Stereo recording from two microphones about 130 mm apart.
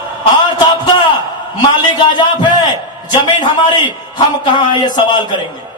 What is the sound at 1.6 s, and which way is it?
Speech, 35° left (ahead or behind).